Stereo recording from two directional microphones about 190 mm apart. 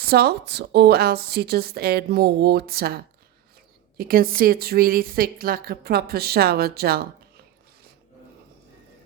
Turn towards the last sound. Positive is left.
turn(degrees=-55)  # may be behind; listen again after turning